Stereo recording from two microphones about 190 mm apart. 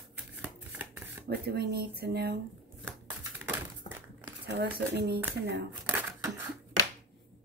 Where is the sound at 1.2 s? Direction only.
55° right (ahead or behind).